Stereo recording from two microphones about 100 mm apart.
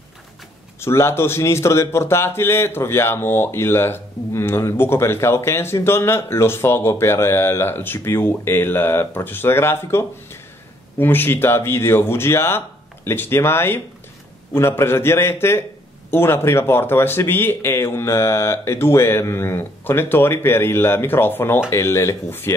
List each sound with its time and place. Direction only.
0.7 s a man's voice: 25° left (ahead or behind)